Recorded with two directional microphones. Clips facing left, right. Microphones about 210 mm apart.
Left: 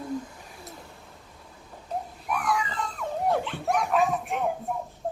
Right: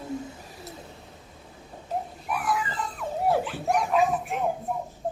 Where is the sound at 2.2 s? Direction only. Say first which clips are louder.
Left 2 dB; 5° right (ahead or behind).